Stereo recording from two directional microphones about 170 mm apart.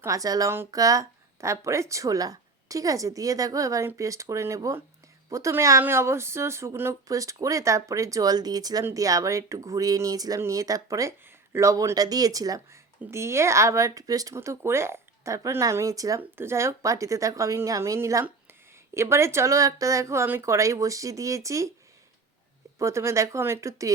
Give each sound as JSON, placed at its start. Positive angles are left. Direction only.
{"t": 0.0, "sound": "a woman's voice", "side_deg": -20}
{"t": 22.8, "sound": "speech", "side_deg": -15}